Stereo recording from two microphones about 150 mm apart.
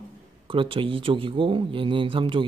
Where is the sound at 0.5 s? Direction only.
35° right (ahead or behind).